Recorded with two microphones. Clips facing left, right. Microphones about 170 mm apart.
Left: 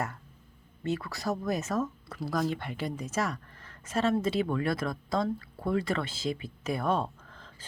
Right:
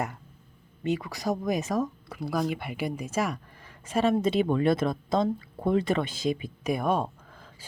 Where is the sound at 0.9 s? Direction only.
15° right (ahead or behind).